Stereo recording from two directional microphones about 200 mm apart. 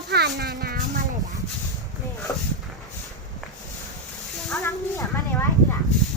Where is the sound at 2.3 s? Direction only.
15° left (ahead or behind).